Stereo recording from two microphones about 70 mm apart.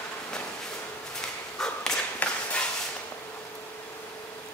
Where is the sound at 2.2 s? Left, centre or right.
Left.